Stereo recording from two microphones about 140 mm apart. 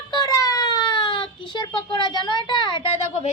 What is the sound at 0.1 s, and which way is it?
Speech, 25° left (ahead or behind).